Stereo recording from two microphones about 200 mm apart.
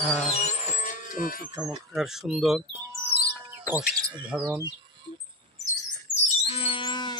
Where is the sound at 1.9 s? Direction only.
Centre (ahead or behind).